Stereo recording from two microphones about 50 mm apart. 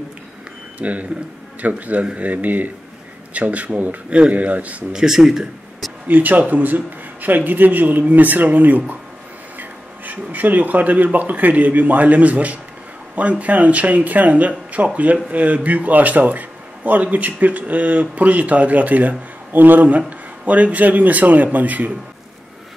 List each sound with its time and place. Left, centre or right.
0.7 s a man's voice: right
4.9 s speech: centre
6.0 s a man's voice: right